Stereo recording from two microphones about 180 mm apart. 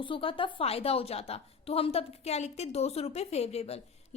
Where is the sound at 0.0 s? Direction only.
30° left (ahead or behind).